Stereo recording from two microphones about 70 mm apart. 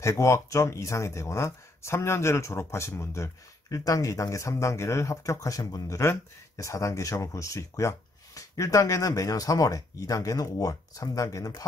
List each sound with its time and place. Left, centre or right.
0.0 s speech: left